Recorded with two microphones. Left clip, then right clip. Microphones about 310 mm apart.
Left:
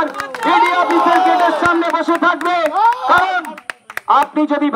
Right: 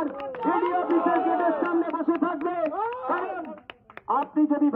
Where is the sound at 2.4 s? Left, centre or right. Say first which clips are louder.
Left 13 dB; left.